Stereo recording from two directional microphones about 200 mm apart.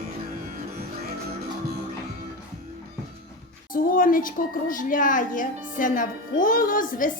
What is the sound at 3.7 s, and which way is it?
A woman's voice, 45° left (ahead or behind).